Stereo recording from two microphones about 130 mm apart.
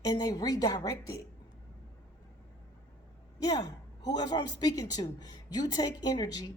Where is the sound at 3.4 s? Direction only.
30° left (ahead or behind).